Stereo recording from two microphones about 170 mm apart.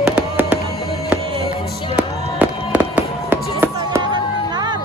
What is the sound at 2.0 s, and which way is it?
Fireworks, 10° right (ahead or behind).